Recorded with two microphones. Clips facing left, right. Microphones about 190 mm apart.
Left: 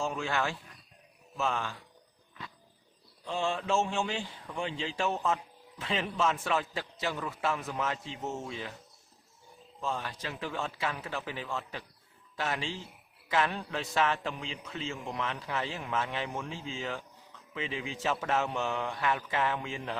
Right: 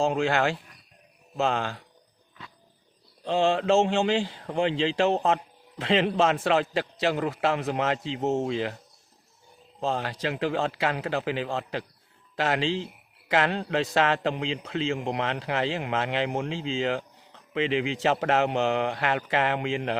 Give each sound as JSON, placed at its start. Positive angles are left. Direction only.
{"t": 0.0, "sound": "a man's voice", "side_deg": -80}
{"t": 3.2, "sound": "a man's voice", "side_deg": -80}
{"t": 9.8, "sound": "a man's voice", "side_deg": -85}
{"t": 17.3, "sound": "a man's voice", "side_deg": -80}